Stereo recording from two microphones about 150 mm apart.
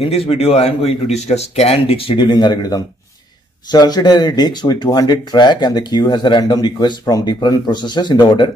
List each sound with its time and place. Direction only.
0.0 s speech: 40° left (ahead or behind)